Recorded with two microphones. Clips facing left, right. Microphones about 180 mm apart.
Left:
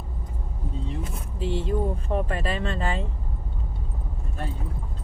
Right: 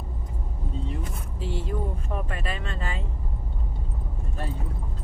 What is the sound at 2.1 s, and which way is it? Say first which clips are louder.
Speech: left 6 dB; 35° left (ahead or behind).